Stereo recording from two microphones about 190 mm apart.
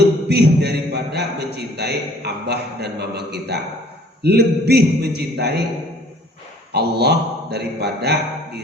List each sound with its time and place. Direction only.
0.3 s a man's voice: 60° right (ahead or behind)
6.7 s mantra: 60° right (ahead or behind)